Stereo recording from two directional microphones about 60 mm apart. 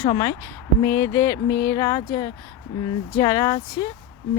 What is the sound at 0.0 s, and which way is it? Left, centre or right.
Speech, left.